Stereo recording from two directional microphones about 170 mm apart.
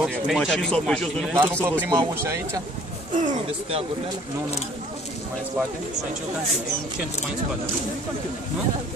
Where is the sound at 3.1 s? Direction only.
45° right (ahead or behind).